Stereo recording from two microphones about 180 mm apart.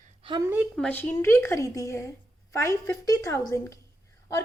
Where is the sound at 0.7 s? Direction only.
10° left (ahead or behind).